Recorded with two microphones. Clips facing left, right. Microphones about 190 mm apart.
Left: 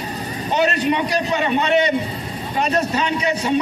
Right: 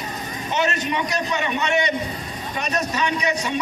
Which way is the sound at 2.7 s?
30° left (ahead or behind).